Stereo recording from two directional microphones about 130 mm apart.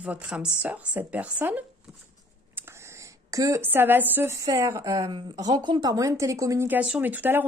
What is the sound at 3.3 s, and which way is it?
Speech, 25° right (ahead or behind).